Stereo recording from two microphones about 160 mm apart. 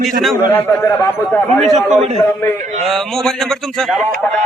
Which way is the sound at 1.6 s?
45° right (ahead or behind).